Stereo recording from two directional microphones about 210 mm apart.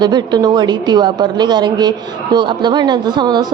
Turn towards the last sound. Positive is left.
turn(degrees=-20)  # may be behind; listen again after turning